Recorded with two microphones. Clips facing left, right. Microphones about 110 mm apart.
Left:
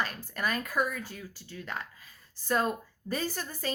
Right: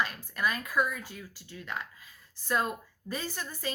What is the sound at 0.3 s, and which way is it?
A woman's voice, 45° left (ahead or behind).